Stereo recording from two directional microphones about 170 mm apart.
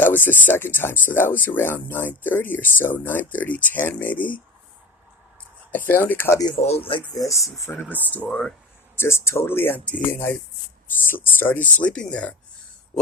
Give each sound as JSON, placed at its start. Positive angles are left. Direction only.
{"t": 0.0, "sound": "speech", "side_deg": 10}
{"t": 5.7, "sound": "speech", "side_deg": 10}
{"t": 9.0, "sound": "speech", "side_deg": 15}